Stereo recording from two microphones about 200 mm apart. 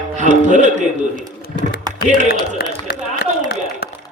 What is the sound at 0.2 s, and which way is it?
Speech, 35° right (ahead or behind).